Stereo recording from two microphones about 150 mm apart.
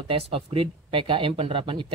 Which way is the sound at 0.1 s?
40° right (ahead or behind).